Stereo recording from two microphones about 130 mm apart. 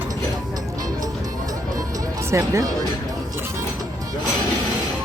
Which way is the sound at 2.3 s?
25° right (ahead or behind).